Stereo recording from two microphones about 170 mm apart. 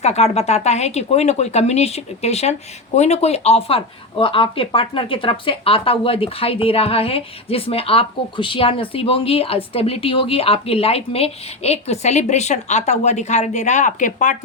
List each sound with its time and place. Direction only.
0.0 s speech: 40° left (ahead or behind)